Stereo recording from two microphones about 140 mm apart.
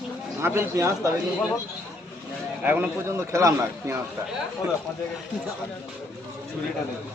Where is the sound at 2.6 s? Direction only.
15° right (ahead or behind).